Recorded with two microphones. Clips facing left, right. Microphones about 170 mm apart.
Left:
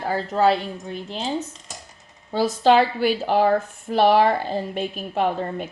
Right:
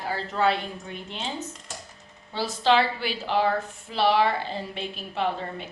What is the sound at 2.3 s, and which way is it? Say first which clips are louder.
Speech: left 5 dB; 45° left (ahead or behind).